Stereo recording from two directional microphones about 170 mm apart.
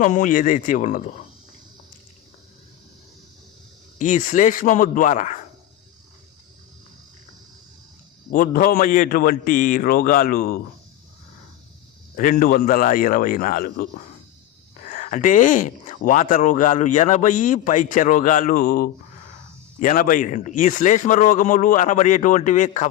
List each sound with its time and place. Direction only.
0.0 s speech: 50° left (ahead or behind)
3.9 s speech: 45° left (ahead or behind)
8.3 s a man's voice: 55° left (ahead or behind)
12.1 s a man's voice: 55° left (ahead or behind)
14.8 s speech: 50° left (ahead or behind)